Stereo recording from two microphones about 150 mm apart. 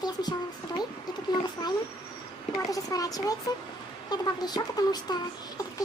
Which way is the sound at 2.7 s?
25° left (ahead or behind).